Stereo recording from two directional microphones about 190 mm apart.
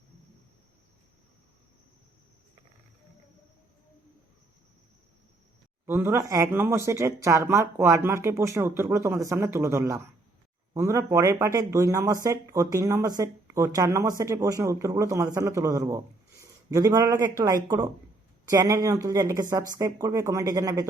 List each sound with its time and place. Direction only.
5.8 s speech: 10° right (ahead or behind)